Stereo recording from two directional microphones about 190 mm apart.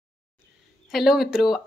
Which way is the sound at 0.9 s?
Centre (ahead or behind).